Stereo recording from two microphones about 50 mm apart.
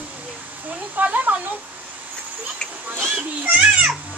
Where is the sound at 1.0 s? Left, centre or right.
Right.